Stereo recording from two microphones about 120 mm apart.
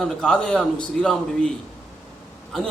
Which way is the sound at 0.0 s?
5° left (ahead or behind).